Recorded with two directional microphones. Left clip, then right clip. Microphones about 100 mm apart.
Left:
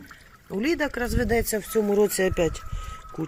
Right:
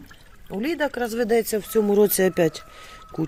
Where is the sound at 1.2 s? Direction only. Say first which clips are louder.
Right 4 dB; 15° right (ahead or behind).